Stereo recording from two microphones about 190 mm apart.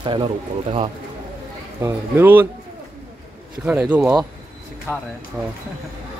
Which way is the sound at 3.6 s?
5° right (ahead or behind).